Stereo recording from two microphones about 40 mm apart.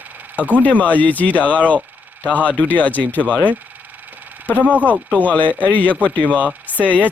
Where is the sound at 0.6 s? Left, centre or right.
Left.